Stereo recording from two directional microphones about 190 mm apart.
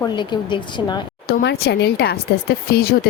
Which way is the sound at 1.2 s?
60° left (ahead or behind).